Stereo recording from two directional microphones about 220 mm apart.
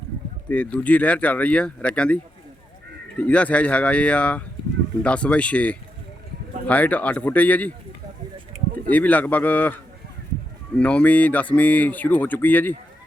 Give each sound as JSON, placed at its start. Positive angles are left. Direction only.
{"t": 0.4, "sound": "speech", "side_deg": 5}
{"t": 3.2, "sound": "speech", "side_deg": 5}
{"t": 8.5, "sound": "a sound", "side_deg": -30}
{"t": 8.9, "sound": "speech", "side_deg": 5}
{"t": 10.8, "sound": "speech", "side_deg": 5}